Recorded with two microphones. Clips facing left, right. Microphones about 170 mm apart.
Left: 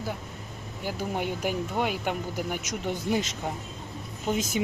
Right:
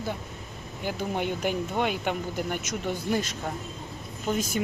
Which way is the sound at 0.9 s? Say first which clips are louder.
Right 1 dB; 5° left (ahead or behind).